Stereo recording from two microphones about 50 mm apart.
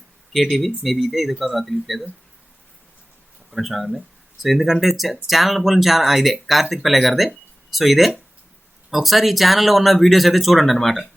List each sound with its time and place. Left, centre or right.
0.5 s speech: centre
3.5 s speech: centre